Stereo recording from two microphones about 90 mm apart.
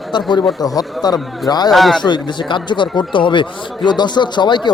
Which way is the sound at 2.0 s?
60° left (ahead or behind).